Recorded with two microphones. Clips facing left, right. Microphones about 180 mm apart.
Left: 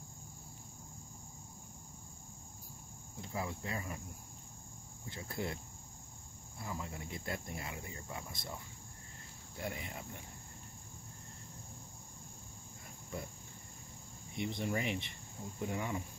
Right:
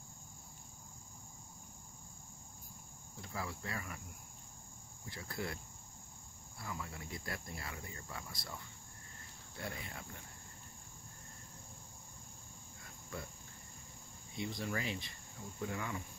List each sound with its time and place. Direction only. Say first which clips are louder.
3.2 s cricket: left 3 dB; 20° left (ahead or behind)
5.0 s cricket: left 2 dB; 20° left (ahead or behind)
6.6 s cricket: left 2 dB; 20° left (ahead or behind)
9.6 s cricket: left 3 dB; 15° left (ahead or behind)
14.3 s cricket: left 3 dB; 20° left (ahead or behind)